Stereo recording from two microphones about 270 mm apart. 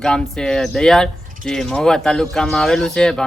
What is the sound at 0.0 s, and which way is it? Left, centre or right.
A woman's voice, centre.